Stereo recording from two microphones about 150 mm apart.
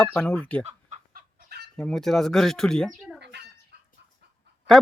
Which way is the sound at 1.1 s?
85° right.